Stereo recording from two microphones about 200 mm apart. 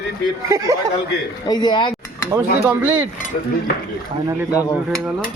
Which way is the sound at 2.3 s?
15° right (ahead or behind).